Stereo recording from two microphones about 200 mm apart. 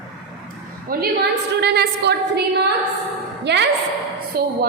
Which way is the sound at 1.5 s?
55° right (ahead or behind).